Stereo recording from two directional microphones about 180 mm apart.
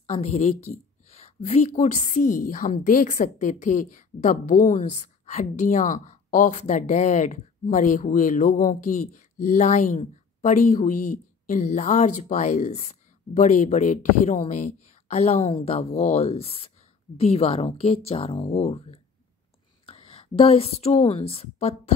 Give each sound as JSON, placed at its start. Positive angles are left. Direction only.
{"t": 0.0, "sound": "a woman's voice", "side_deg": 35}